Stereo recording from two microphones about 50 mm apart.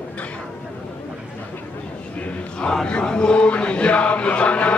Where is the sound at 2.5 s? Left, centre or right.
Centre.